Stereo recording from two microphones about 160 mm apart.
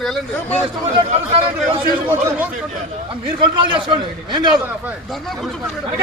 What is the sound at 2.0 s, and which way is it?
Speech, 10° right (ahead or behind).